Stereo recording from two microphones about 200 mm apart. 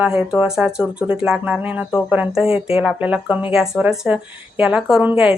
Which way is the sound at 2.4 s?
30° left (ahead or behind).